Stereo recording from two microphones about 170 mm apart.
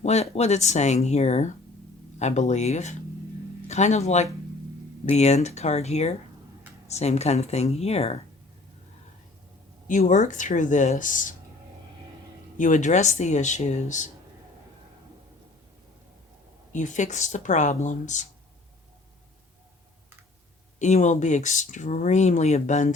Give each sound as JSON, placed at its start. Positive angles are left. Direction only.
{"t": 0.0, "sound": "speech", "side_deg": 40}
{"t": 9.8, "sound": "speech", "side_deg": 45}
{"t": 12.5, "sound": "speech", "side_deg": 50}
{"t": 16.7, "sound": "speech", "side_deg": 45}
{"t": 20.7, "sound": "speech", "side_deg": 45}